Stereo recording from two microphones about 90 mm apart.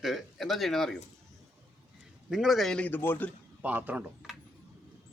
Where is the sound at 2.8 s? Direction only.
20° left (ahead or behind).